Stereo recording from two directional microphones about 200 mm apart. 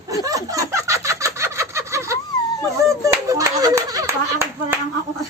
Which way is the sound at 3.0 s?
15° right (ahead or behind).